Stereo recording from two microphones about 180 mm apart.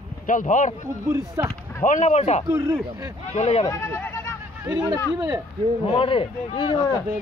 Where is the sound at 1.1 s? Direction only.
15° right (ahead or behind).